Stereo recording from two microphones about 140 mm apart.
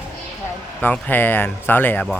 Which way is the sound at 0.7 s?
10° left (ahead or behind).